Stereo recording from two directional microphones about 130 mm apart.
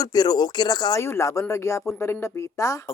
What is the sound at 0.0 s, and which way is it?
Speech, 30° left (ahead or behind).